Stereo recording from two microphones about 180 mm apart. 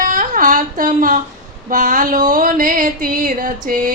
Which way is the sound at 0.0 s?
45° right (ahead or behind).